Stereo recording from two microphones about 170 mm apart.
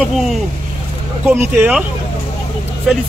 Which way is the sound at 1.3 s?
10° right (ahead or behind).